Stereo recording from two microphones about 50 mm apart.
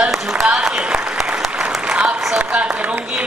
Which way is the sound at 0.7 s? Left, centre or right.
Right.